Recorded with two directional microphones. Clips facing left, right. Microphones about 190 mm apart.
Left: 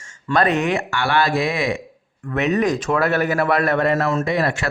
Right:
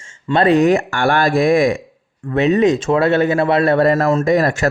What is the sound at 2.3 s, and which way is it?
A man's voice, 30° right (ahead or behind).